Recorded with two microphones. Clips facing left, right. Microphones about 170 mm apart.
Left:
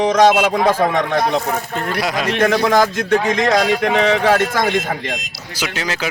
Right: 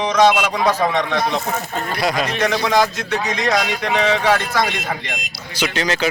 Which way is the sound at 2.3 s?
50° left (ahead or behind).